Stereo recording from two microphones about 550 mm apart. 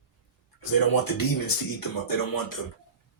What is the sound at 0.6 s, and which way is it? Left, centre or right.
A man's voice, left.